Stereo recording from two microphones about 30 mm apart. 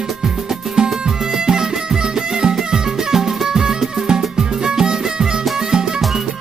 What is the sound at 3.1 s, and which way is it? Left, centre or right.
Music, centre.